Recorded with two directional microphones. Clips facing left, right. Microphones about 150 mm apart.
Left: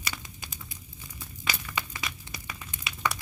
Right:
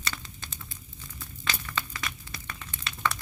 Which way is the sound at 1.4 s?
10° left (ahead or behind).